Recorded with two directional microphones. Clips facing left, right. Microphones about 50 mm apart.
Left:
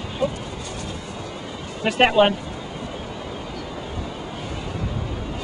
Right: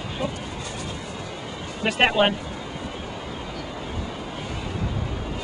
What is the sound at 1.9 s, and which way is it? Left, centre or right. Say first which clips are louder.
Speech: left 3 dB; centre.